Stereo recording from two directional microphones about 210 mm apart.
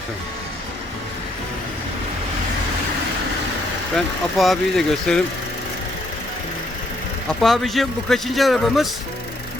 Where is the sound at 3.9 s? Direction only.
Centre (ahead or behind).